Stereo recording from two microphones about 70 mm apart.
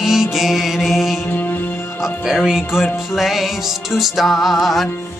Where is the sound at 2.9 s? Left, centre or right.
Centre.